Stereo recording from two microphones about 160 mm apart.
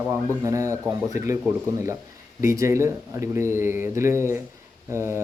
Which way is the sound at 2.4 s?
20° right (ahead or behind).